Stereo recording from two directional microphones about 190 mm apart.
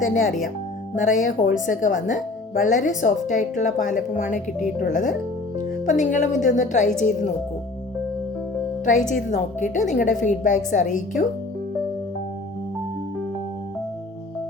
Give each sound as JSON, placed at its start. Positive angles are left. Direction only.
{"t": 0.0, "sound": "a woman's voice", "side_deg": 45}
{"t": 8.8, "sound": "a woman's voice", "side_deg": 40}